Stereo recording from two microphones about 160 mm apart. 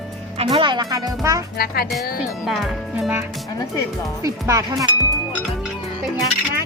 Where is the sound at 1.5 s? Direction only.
75° left (ahead or behind).